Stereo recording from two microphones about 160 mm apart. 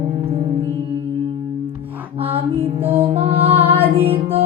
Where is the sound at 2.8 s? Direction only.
35° right (ahead or behind).